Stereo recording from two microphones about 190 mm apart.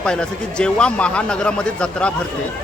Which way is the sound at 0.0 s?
5° left (ahead or behind).